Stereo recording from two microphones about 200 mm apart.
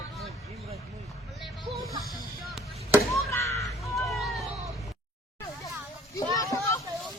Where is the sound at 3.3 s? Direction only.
15° left (ahead or behind).